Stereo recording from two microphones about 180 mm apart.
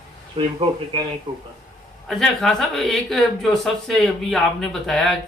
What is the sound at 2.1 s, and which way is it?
Speech, centre (ahead or behind).